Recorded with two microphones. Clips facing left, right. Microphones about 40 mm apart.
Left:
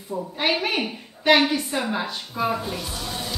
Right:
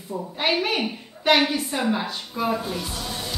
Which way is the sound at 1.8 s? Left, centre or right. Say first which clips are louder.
Right 2 dB; centre.